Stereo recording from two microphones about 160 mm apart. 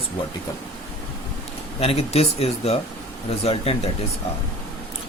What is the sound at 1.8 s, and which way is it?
Speech, 40° left (ahead or behind).